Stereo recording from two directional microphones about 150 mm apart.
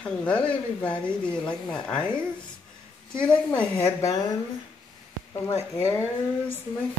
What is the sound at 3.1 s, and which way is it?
Speech, 5° left (ahead or behind).